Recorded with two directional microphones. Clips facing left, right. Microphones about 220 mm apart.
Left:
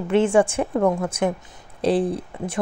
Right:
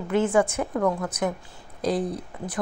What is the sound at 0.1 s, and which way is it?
Speech, 30° left (ahead or behind).